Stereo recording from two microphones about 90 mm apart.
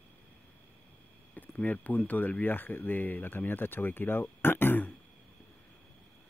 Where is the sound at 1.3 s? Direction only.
15° left (ahead or behind).